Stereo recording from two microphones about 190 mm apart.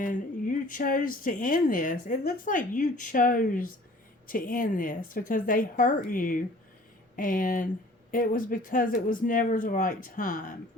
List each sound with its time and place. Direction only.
0.0 s speech: 45° left (ahead or behind)